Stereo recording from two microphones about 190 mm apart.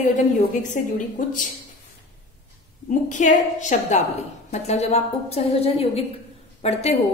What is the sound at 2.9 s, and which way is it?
A woman's voice, 40° left (ahead or behind).